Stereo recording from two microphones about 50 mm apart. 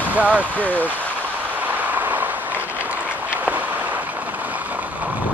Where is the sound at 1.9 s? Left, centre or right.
Right.